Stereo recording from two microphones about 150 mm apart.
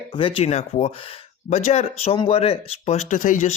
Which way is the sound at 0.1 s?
35° left (ahead or behind).